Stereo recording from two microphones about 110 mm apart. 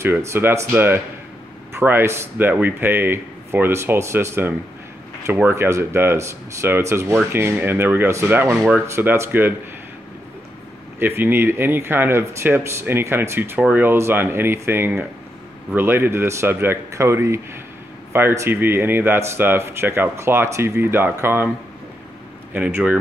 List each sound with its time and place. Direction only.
0.0 s speech: 25° right (ahead or behind)
11.0 s speech: 20° right (ahead or behind)
22.5 s speech: 15° right (ahead or behind)